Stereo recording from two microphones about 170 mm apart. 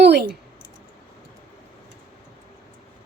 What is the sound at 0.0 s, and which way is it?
Clicking, 75° right (ahead or behind).